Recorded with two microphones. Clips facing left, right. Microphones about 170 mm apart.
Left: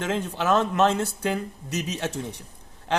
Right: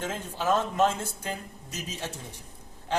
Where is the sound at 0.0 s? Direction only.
70° left (ahead or behind).